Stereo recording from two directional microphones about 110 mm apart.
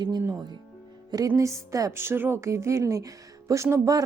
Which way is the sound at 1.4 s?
25° right (ahead or behind).